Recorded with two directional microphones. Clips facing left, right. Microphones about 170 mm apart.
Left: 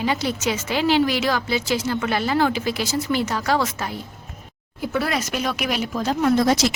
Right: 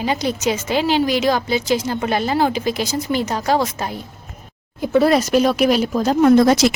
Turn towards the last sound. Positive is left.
turn(degrees=-55)  # may be behind; listen again after turning